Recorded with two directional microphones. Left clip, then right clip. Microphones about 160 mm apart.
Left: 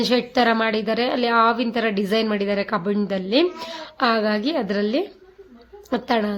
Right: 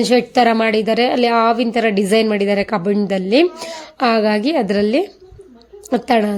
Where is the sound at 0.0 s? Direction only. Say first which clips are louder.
Right 6 dB; 25° right (ahead or behind).